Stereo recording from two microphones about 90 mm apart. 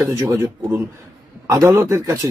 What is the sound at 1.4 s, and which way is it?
Speech, 40° right (ahead or behind).